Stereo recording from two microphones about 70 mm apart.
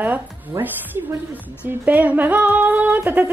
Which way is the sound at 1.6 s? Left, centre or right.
Right.